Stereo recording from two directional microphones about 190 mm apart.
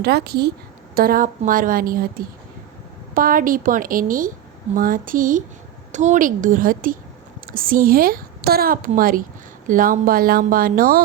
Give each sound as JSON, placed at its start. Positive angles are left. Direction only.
{"t": 0.0, "sound": "a woman's voice", "side_deg": -55}